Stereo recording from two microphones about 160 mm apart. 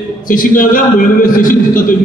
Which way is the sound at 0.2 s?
60° left (ahead or behind).